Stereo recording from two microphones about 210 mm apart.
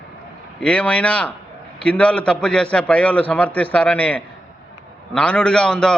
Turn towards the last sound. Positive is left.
turn(degrees=5)  # may be behind; listen again after turning